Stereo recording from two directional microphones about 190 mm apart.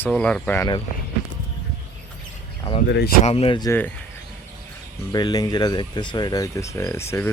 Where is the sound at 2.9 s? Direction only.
60° left (ahead or behind).